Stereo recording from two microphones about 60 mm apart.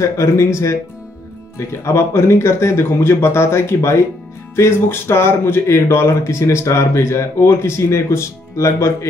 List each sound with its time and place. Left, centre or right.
0.0 s speech: left